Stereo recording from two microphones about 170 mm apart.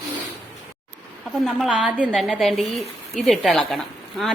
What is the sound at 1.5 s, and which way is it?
A woman's voice, centre (ahead or behind).